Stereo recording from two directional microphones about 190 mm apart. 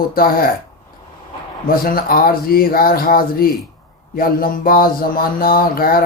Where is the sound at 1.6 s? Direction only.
50° left (ahead or behind).